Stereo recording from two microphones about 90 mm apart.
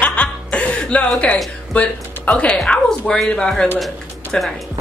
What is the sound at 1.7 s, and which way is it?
Speech, 15° left (ahead or behind).